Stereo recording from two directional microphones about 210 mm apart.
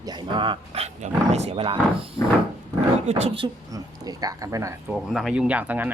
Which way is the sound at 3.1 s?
30° right (ahead or behind).